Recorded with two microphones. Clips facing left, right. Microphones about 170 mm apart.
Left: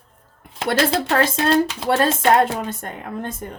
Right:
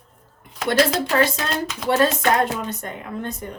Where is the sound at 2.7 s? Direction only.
50° left (ahead or behind).